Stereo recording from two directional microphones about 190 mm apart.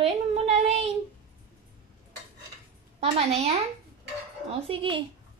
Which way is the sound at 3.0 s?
35° right (ahead or behind).